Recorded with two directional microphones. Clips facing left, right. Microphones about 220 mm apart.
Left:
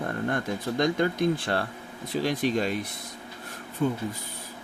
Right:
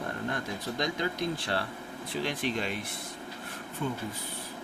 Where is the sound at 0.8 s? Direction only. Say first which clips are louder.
Left 8 dB; 50° left (ahead or behind).